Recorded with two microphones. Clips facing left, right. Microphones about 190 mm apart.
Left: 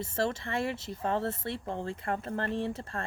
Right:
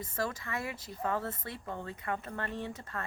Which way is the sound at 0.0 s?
25° left (ahead or behind).